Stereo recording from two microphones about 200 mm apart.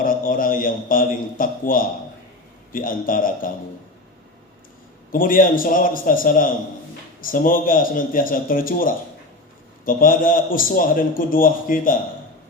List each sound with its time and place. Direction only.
0.0 s a man's voice: 45° left (ahead or behind)
5.1 s a man's voice: 45° left (ahead or behind)